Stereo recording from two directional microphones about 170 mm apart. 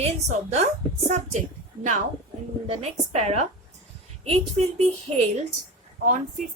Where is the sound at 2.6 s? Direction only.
40° right (ahead or behind).